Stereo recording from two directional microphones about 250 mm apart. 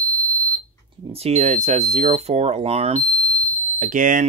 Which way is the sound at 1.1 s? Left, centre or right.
Right.